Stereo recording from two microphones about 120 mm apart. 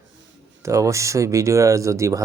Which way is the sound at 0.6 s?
25° right (ahead or behind).